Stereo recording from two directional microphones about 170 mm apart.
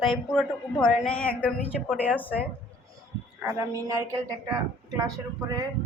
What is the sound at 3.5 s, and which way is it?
Speech, 20° right (ahead or behind).